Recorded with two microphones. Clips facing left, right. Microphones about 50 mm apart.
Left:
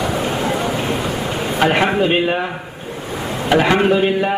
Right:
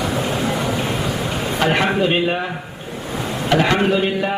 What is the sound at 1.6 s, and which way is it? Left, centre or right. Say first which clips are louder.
Speech: left 3 dB; centre.